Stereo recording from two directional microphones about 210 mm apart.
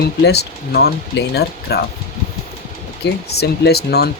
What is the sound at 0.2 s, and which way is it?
Speech, 50° left (ahead or behind).